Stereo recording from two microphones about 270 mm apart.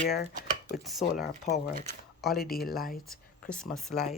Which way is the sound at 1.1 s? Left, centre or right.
Left.